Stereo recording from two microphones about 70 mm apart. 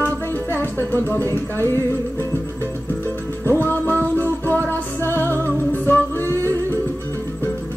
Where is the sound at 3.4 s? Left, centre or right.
Left.